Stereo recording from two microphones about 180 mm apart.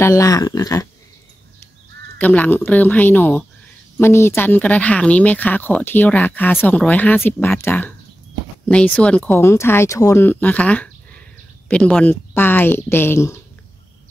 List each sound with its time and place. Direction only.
0.0 s speech: 15° left (ahead or behind)
2.1 s speech: 10° left (ahead or behind)